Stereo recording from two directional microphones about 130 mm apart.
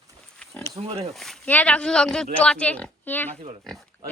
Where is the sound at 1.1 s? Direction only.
Centre (ahead or behind).